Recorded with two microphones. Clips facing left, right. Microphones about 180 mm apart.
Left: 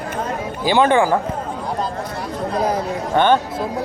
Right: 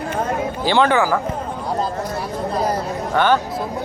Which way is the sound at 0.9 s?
25° left (ahead or behind).